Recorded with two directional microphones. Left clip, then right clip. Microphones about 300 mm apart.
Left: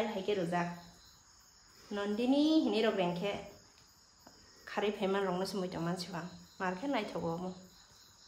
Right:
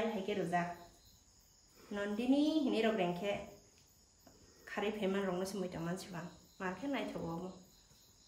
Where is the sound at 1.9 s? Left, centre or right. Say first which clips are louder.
Left 3 dB; centre.